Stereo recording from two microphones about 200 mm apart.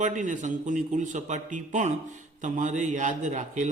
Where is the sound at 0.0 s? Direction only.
40° right (ahead or behind).